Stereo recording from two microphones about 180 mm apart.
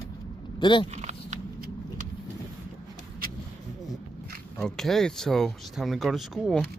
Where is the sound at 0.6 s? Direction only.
25° left (ahead or behind).